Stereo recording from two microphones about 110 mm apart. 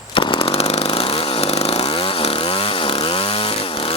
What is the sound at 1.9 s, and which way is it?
Chainsaw, 45° left (ahead or behind).